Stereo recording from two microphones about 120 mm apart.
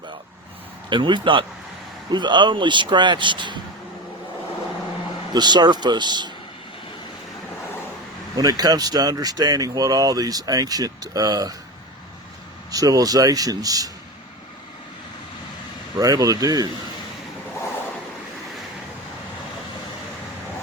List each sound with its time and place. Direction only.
0.9 s speech: 40° right (ahead or behind)
5.3 s speech: 35° right (ahead or behind)
8.4 s speech: 35° right (ahead or behind)
12.7 s speech: 30° right (ahead or behind)
16.0 s speech: 30° right (ahead or behind)